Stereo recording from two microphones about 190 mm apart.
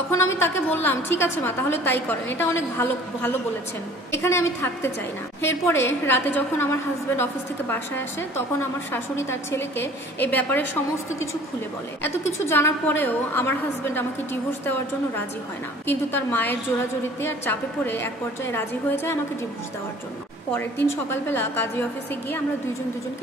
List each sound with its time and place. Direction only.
0.1 s a woman's voice: 15° left (ahead or behind)
12.4 s a woman's voice: 10° left (ahead or behind)
20.8 s a woman's voice: 10° left (ahead or behind)